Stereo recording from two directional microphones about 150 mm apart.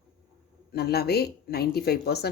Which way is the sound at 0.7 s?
90° left.